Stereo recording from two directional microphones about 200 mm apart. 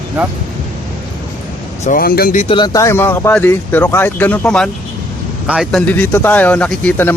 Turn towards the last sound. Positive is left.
turn(degrees=10)  # may be behind; listen again after turning